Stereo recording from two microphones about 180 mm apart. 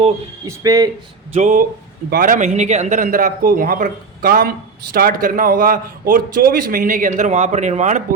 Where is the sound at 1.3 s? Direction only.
45° right (ahead or behind).